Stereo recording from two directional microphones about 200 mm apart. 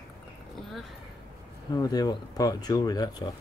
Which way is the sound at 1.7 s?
20° left (ahead or behind).